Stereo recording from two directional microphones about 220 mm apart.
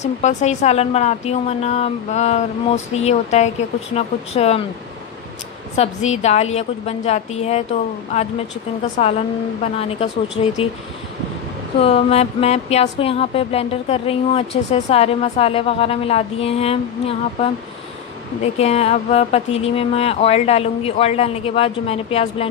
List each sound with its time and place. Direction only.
0.0 s a woman's voice: 30° left (ahead or behind)
5.8 s speech: 30° left (ahead or behind)
9.0 s speech: 30° left (ahead or behind)
11.8 s speech: 25° left (ahead or behind)